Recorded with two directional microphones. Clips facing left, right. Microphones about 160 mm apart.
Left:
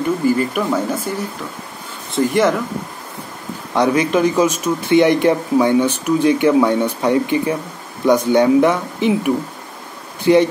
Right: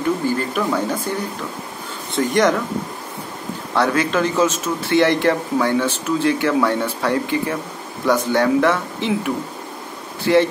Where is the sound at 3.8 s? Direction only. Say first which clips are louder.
Left 3 dB; 15° left (ahead or behind).